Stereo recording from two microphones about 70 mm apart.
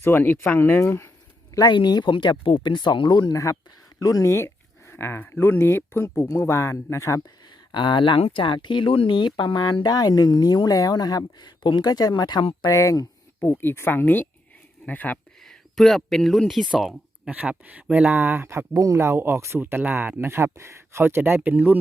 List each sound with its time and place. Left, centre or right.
0.0 s speech: left
1.5 s speech: left
3.3 s speech: left
7.5 s a sound: left
9.1 s speech: left
12.7 s speech: left
13.4 s speech: left
15.4 s speech: centre
17.3 s speech: right
18.1 s speech: right
18.7 s speech: right
18.9 s speech: right